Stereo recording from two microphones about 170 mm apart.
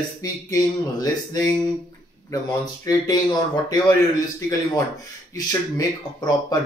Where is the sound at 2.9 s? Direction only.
25° left (ahead or behind).